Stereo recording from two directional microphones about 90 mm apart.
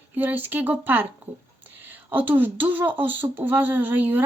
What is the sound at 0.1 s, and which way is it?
Speech, 20° right (ahead or behind).